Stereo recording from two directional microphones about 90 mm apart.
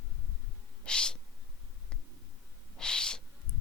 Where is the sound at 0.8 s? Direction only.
10° left (ahead or behind).